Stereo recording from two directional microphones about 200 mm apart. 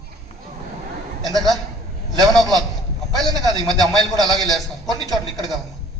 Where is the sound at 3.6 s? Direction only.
20° right (ahead or behind).